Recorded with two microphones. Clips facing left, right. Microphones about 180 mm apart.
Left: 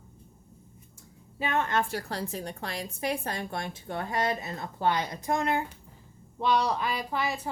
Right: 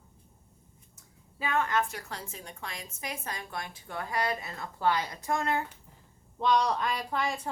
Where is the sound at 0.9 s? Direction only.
25° left (ahead or behind).